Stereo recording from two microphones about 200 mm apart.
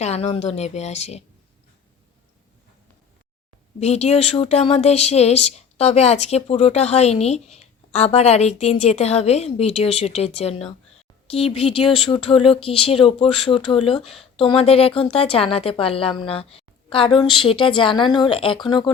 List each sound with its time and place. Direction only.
0.0 s speech: 30° left (ahead or behind)
3.8 s a woman's voice: 35° left (ahead or behind)